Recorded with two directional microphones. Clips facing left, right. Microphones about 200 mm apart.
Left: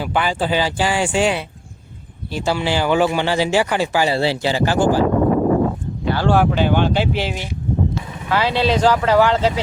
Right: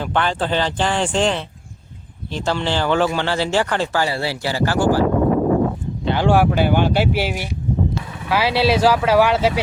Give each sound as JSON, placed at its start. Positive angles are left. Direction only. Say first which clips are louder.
{"t": 0.0, "sound": "speech", "louder": "left 1 dB", "side_deg": 5}
{"t": 4.1, "sound": "speech", "louder": "left 5 dB", "side_deg": 25}
{"t": 6.1, "sound": "speech", "louder": "even", "side_deg": -15}